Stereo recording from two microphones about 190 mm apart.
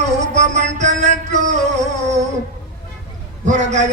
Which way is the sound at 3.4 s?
40° right (ahead or behind).